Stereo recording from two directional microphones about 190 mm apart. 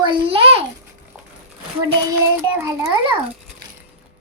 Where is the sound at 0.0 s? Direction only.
30° right (ahead or behind).